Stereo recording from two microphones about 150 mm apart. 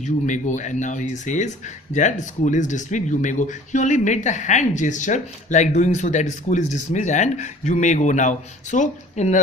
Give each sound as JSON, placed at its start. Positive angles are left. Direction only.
{"t": 0.0, "sound": "speech", "side_deg": 55}